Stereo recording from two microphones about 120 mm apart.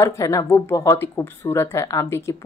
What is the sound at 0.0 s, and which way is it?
Speech, 25° left (ahead or behind).